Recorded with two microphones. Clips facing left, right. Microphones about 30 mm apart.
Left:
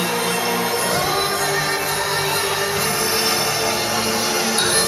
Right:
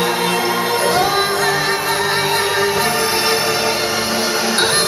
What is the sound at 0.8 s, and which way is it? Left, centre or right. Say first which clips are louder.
Music: right 5 dB; right.